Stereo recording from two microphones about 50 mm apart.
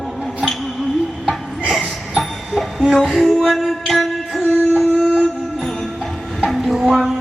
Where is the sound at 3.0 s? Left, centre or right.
Centre.